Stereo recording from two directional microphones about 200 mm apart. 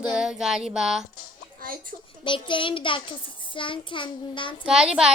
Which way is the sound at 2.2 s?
25° left (ahead or behind).